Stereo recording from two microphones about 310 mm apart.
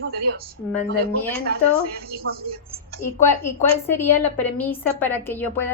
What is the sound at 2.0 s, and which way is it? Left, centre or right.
A woman's voice, right.